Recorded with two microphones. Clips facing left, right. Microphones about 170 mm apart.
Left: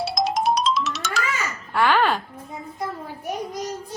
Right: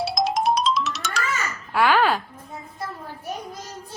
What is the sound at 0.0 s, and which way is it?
Music, centre (ahead or behind).